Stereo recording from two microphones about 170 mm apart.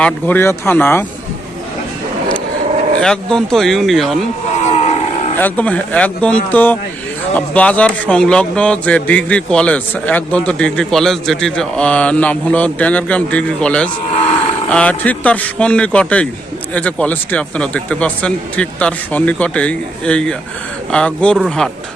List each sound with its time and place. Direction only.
0.0 s speech: 10° left (ahead or behind)
3.0 s speech: 5° left (ahead or behind)
4.6 s a sound: 40° left (ahead or behind)
5.4 s speech: 10° left (ahead or behind)